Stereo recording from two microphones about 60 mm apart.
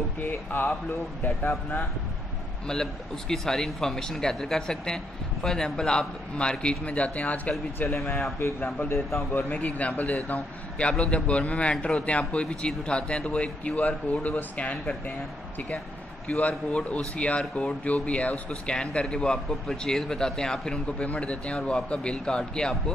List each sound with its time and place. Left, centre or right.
0.2 s speech: left
2.7 s speech: centre
7.9 s speech: left
8.5 s a man's voice: left
8.8 s speech: left
9.5 s a man's voice: left
16.3 s a man's voice: left